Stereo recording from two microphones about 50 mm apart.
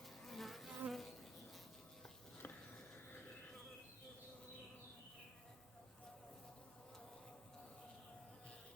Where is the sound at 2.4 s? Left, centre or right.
Left.